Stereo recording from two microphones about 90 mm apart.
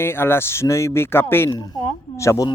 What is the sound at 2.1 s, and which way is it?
Speech, 35° left (ahead or behind).